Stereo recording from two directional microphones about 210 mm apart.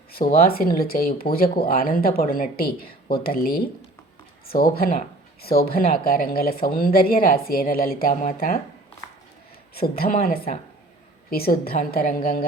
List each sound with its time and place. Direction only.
0.1 s speech: 45° left (ahead or behind)
9.7 s speech: 45° left (ahead or behind)